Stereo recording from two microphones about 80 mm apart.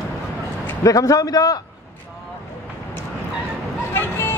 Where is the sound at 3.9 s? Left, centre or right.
Left.